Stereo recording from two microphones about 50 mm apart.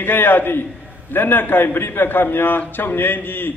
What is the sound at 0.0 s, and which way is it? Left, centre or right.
A man's voice, left.